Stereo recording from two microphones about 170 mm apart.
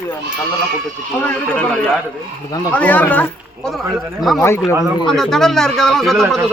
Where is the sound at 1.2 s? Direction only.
10° left (ahead or behind).